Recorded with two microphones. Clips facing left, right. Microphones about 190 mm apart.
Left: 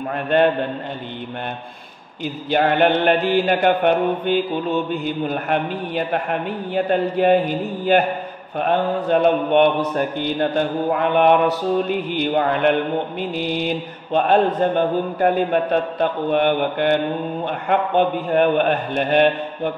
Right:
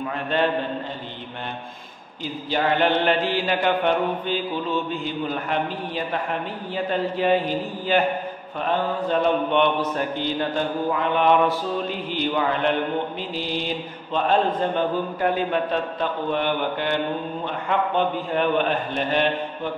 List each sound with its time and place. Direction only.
0.1 s mantra: 55° left (ahead or behind)
2.5 s mantra: 55° left (ahead or behind)
6.7 s a man's voice: 55° left (ahead or behind)
8.5 s mantra: 60° left (ahead or behind)